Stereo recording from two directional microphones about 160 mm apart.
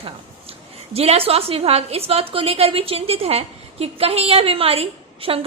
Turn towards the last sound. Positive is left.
turn(degrees=-35)  # may be behind; listen again after turning